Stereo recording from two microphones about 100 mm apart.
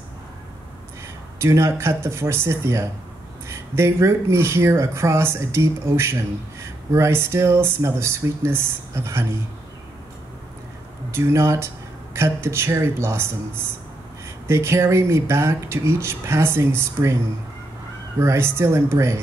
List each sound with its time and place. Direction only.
1.4 s speech: 25° right (ahead or behind)
11.1 s speech: 30° right (ahead or behind)
14.5 s speech: 30° right (ahead or behind)
18.2 s speech: 25° right (ahead or behind)